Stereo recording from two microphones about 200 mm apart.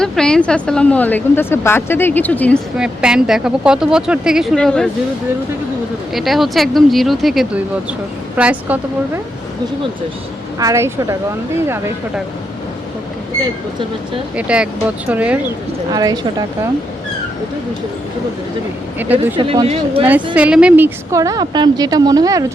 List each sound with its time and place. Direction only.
0.0 s a woman's voice: 5° left (ahead or behind)
2.7 s speech: 5° right (ahead or behind)
6.1 s a woman's voice: centre (ahead or behind)
10.6 s a woman's voice: 15° right (ahead or behind)
14.3 s a woman's voice: 5° right (ahead or behind)
15.9 s speech: 20° right (ahead or behind)
19.1 s speech: 25° right (ahead or behind)
20.3 s a woman's voice: 5° right (ahead or behind)